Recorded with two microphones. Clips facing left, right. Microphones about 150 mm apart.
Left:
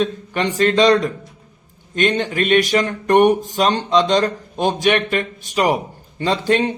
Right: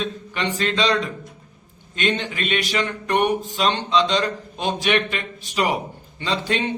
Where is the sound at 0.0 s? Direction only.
45° left (ahead or behind).